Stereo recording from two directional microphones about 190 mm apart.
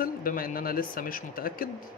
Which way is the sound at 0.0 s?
50° left (ahead or behind).